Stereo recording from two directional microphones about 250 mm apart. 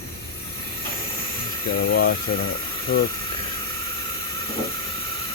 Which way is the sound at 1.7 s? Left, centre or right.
Left.